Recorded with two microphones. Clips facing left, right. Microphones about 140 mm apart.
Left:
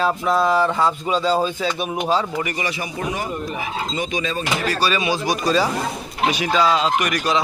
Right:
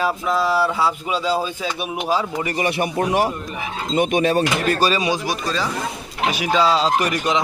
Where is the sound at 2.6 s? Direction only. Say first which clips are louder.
Right 5 dB; 60° right (ahead or behind).